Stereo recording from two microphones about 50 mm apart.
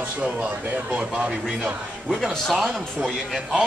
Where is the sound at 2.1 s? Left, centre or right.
Centre.